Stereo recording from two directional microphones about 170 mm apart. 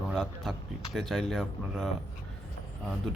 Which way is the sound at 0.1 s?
Centre (ahead or behind).